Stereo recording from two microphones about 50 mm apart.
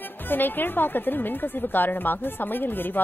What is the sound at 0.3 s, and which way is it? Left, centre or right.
A woman's voice, left.